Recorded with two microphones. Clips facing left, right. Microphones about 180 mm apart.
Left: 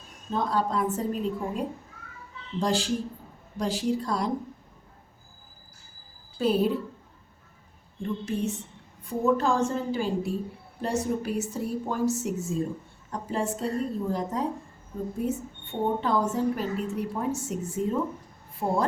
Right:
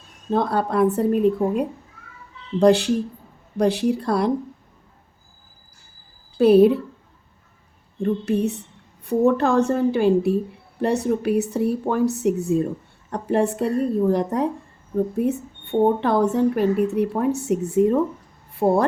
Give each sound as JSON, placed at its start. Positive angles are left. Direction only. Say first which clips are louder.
{"t": 0.3, "sound": "a woman's voice", "louder": "right 6 dB", "side_deg": -65}
{"t": 6.4, "sound": "a woman's voice", "louder": "right 11 dB", "side_deg": -65}
{"t": 8.0, "sound": "a woman's voice", "louder": "right 8 dB", "side_deg": -65}